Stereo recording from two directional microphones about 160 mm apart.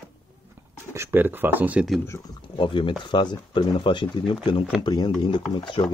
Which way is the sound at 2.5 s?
30° left (ahead or behind).